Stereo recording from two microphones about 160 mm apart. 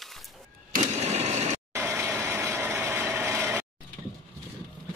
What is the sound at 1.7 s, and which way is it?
Ratchet, 15° right (ahead or behind).